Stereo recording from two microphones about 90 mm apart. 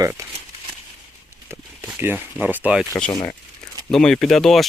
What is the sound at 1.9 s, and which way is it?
Speech, 20° right (ahead or behind).